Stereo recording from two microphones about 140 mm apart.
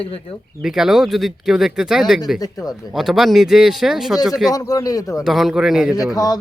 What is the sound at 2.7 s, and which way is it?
Speech, centre (ahead or behind).